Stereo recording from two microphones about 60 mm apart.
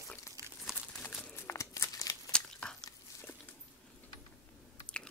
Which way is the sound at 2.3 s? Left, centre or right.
Centre.